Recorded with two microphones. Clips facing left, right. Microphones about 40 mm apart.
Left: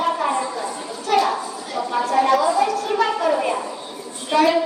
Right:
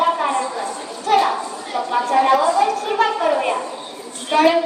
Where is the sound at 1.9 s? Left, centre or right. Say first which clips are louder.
Right 2 dB; right.